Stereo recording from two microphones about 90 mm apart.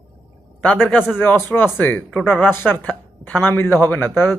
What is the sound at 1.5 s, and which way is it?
A man's voice, 20° left (ahead or behind).